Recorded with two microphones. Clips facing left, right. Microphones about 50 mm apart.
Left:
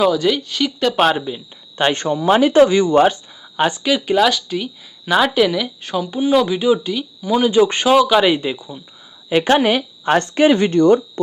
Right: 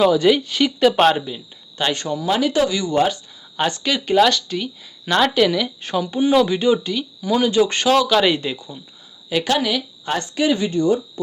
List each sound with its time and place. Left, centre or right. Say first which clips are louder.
0.0 s speech: right 1 dB; centre
1.8 s speech: left 5 dB; left
3.6 s speech: left 4 dB; centre
9.3 s speech: left 5 dB; left